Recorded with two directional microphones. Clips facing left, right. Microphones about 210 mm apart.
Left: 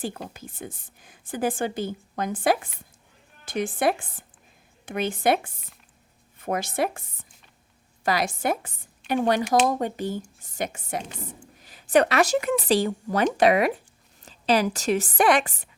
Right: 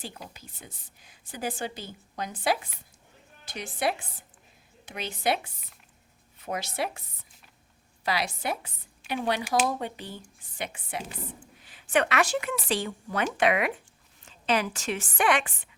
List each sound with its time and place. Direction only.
0.0 s a woman's voice: 50° left (ahead or behind)